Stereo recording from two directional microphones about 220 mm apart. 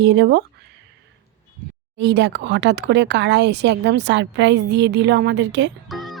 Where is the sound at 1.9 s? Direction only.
55° right (ahead or behind).